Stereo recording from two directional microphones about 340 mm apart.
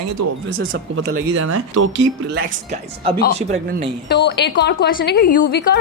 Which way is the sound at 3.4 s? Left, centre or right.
Centre.